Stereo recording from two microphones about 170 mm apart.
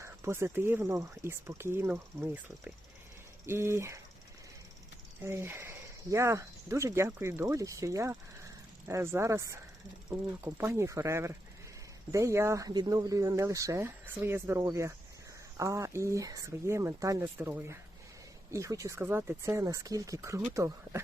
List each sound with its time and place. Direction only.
0.0 s speech: 15° right (ahead or behind)
5.2 s speech: 15° right (ahead or behind)